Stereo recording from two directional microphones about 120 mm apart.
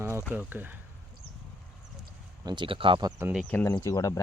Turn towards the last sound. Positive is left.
turn(degrees=30)  # may be behind; listen again after turning